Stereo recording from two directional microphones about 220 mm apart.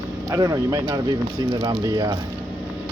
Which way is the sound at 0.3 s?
15° right (ahead or behind).